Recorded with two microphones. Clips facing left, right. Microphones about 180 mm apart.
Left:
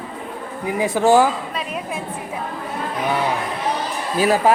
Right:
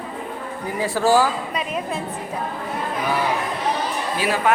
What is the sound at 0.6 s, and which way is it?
Speech, 20° left (ahead or behind).